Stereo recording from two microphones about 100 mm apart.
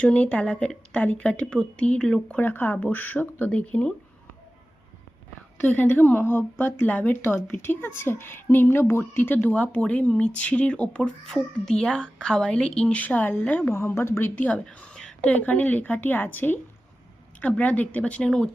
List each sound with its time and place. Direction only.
0.0 s a woman's voice: 10° left (ahead or behind)
2.4 s a woman's voice: 20° left (ahead or behind)
5.6 s a woman's voice: 15° left (ahead or behind)